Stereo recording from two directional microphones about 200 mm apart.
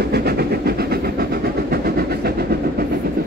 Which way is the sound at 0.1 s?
55° right (ahead or behind).